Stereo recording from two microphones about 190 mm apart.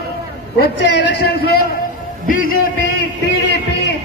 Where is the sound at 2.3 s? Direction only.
45° left (ahead or behind).